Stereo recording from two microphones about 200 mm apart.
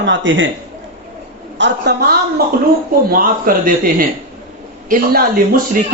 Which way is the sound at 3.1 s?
45° right (ahead or behind).